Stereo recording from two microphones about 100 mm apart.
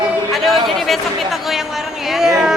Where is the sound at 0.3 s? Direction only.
Centre (ahead or behind).